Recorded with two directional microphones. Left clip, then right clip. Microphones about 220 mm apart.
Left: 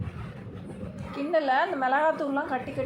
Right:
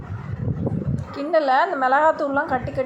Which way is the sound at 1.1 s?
25° right (ahead or behind).